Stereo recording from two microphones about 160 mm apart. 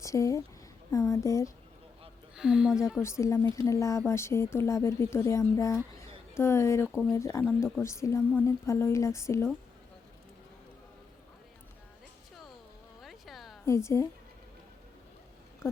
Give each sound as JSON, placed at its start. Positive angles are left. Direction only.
{"t": 0.0, "sound": "a woman's voice", "side_deg": 20}
{"t": 2.3, "sound": "speech", "side_deg": -5}
{"t": 3.0, "sound": "speech", "side_deg": 15}
{"t": 13.0, "sound": "a sound", "side_deg": 0}
{"t": 13.7, "sound": "speech", "side_deg": 20}
{"t": 15.6, "sound": "speech", "side_deg": 15}